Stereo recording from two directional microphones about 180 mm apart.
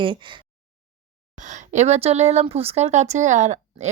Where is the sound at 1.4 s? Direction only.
45° right (ahead or behind).